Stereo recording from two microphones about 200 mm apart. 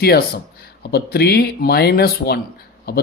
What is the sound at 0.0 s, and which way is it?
Speech, 50° left (ahead or behind).